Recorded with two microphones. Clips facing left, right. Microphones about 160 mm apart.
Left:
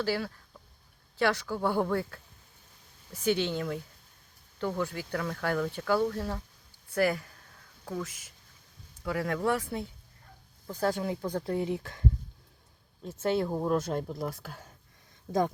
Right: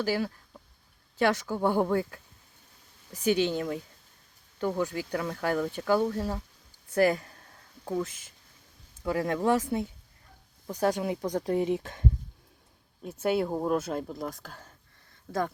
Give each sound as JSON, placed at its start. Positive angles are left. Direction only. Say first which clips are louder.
{"t": 0.0, "sound": "speech", "louder": "right 2 dB", "side_deg": -15}
{"t": 3.2, "sound": "speech", "louder": "right 3 dB", "side_deg": -15}